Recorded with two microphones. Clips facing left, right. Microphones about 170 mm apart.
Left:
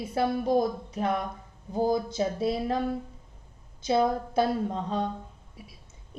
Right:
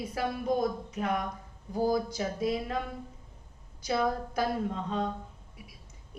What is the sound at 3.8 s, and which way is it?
A woman's voice, 25° left (ahead or behind).